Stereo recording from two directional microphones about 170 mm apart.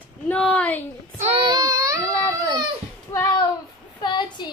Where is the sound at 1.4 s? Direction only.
20° right (ahead or behind).